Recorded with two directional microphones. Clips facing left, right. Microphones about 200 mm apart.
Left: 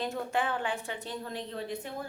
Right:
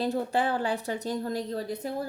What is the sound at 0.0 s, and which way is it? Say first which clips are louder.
A woman's voice: right 5 dB; 35° right (ahead or behind).